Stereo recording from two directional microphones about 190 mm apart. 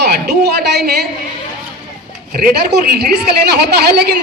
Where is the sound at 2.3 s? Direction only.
55° right (ahead or behind).